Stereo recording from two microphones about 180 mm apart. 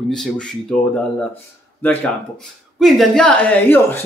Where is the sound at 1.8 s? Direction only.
10° left (ahead or behind).